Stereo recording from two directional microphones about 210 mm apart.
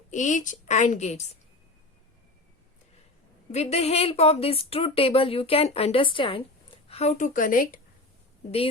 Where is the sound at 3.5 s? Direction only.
30° left (ahead or behind).